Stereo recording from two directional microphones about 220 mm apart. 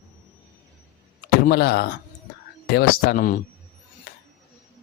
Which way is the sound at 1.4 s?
45° left (ahead or behind).